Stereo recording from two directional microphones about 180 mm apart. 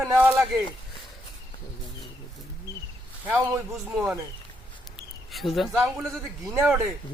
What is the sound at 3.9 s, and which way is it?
Speech, 10° right (ahead or behind).